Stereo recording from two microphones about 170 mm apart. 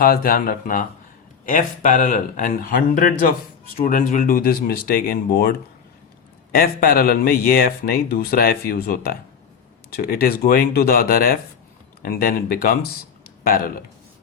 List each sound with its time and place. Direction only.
0.0 s speech: 60° left (ahead or behind)